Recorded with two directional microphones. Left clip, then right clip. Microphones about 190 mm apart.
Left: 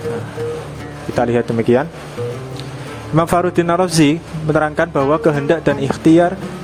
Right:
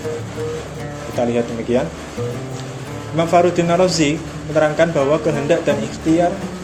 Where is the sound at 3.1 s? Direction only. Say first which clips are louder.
Even; 55° left (ahead or behind).